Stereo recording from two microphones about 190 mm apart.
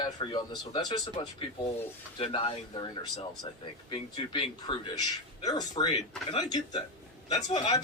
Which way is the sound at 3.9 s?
25° left (ahead or behind).